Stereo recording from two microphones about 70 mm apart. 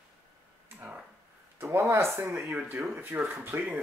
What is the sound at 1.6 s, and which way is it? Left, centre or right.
Speech, right.